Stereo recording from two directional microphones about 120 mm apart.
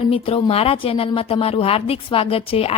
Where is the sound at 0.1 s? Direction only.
50° left (ahead or behind).